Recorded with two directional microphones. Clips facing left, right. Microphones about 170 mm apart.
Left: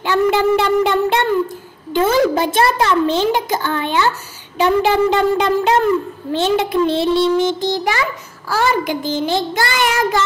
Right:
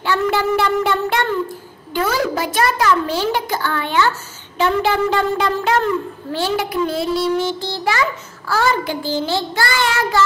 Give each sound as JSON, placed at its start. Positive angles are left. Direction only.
{"t": 0.0, "sound": "a sound", "side_deg": 20}
{"t": 2.0, "sound": "a child's voice", "side_deg": 25}
{"t": 8.5, "sound": "child singing", "side_deg": 15}